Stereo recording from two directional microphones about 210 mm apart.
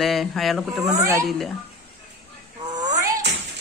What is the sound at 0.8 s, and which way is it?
Speech, 15° right (ahead or behind).